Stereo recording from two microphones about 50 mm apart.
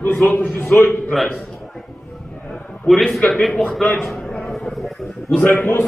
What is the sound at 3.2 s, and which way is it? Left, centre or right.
Speech, centre.